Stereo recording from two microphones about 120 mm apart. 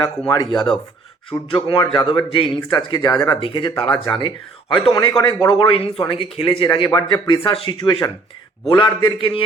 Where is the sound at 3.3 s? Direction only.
50° left (ahead or behind); by 5.4 s 30° left (ahead or behind).